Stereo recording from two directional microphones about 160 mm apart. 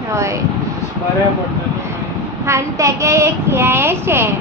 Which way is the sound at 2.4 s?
20° right (ahead or behind).